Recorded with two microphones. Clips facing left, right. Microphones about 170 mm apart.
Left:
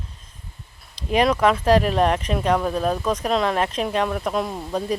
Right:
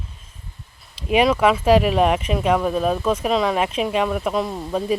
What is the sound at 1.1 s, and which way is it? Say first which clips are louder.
Speech: right 2 dB; 5° right (ahead or behind).